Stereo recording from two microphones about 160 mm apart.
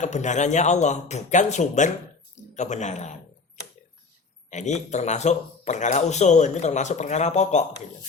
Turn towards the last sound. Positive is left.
turn(degrees=45)  # may be behind; listen again after turning